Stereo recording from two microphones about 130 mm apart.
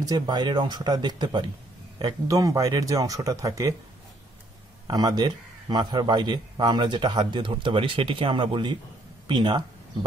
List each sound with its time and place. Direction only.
0.0 s speech: 30° right (ahead or behind)
4.8 s speech: 30° right (ahead or behind)